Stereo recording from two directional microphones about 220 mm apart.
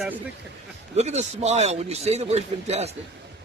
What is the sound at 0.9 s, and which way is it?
Speech, 30° right (ahead or behind).